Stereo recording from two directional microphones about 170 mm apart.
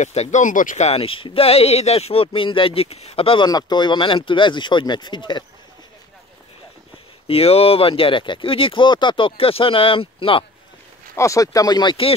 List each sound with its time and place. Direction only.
0.0 s speech: 40° left (ahead or behind); by 5.4 s 25° left (ahead or behind)
7.2 s speech: 35° left (ahead or behind)
11.1 s speech: 20° left (ahead or behind)